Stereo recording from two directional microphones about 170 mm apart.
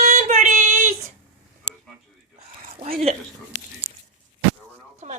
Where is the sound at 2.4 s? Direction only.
35° right (ahead or behind).